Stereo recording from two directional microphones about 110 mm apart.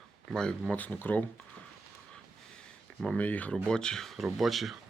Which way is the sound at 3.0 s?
10° left (ahead or behind).